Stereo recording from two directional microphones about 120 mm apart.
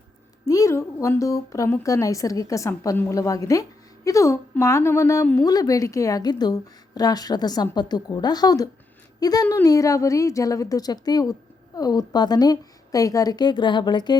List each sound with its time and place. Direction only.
0.4 s a woman's voice: 30° left (ahead or behind)